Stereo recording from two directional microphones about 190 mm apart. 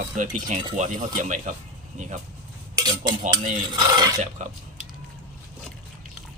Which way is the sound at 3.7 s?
20° right (ahead or behind).